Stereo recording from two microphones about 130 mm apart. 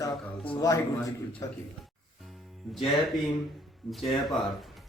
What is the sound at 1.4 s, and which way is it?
Speech, 30° left (ahead or behind).